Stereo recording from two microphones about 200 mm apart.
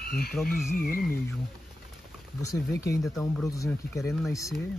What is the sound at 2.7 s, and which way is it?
Speech, 15° left (ahead or behind).